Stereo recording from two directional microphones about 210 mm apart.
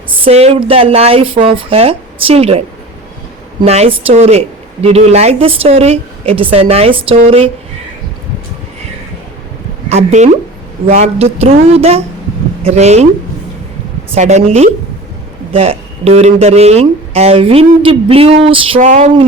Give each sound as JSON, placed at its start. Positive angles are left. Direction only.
{"t": 0.3, "sound": "a woman's voice", "side_deg": -30}
{"t": 9.9, "sound": "a woman's voice", "side_deg": -35}
{"t": 14.2, "sound": "a woman's voice", "side_deg": -30}